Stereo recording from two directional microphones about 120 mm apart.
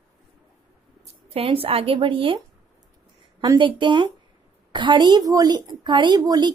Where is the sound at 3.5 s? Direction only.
40° right (ahead or behind).